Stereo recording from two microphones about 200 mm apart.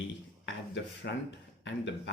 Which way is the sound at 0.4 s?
60° left (ahead or behind).